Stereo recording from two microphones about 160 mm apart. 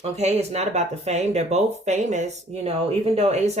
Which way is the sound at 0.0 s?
40° right (ahead or behind).